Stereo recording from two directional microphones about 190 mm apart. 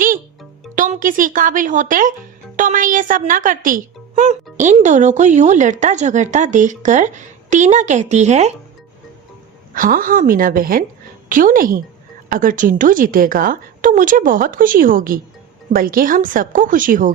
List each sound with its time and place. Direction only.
0.8 s a woman's voice: 45° right (ahead or behind)
9.7 s a woman's voice: 45° right (ahead or behind)